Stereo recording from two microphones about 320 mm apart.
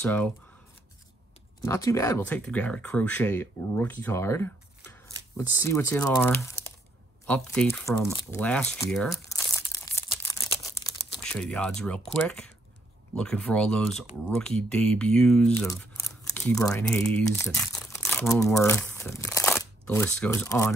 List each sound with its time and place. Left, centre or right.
0.0 s speech: centre
1.6 s speech: centre
7.2 s crumpling: centre
11.3 s speech: centre